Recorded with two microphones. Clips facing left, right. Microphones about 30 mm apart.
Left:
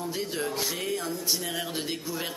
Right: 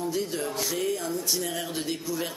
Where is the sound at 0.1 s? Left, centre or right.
Centre.